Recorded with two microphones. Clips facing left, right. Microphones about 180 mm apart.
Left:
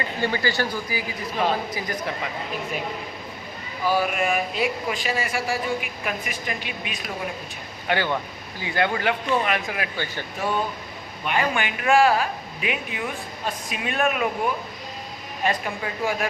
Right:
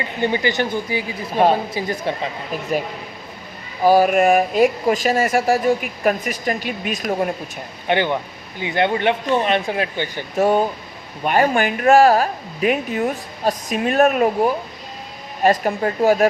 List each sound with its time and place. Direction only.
0.2 s speech: 20° right (ahead or behind)
3.8 s speech: 40° right (ahead or behind)
7.9 s speech: 20° right (ahead or behind)
10.3 s a woman's voice: 45° right (ahead or behind)